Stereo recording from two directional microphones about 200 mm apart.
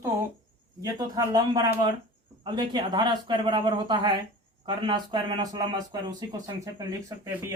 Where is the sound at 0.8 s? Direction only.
15° right (ahead or behind).